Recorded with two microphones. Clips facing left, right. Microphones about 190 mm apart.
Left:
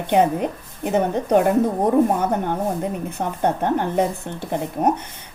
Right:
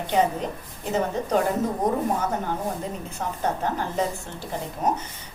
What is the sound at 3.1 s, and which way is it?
A woman's voice, 60° left (ahead or behind).